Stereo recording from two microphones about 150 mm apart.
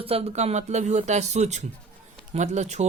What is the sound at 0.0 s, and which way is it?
Speech, 40° right (ahead or behind).